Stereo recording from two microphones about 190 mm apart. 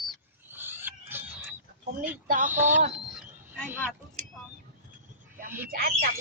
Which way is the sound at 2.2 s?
45° right (ahead or behind).